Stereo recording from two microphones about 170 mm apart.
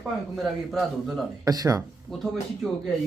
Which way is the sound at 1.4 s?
20° right (ahead or behind).